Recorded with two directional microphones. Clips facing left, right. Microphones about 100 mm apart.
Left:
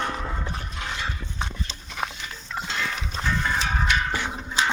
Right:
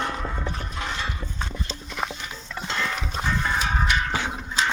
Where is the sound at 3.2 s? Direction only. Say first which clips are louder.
Even; 10° right (ahead or behind).